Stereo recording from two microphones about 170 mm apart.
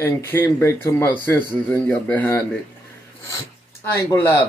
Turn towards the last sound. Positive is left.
turn(degrees=20)  # may be behind; listen again after turning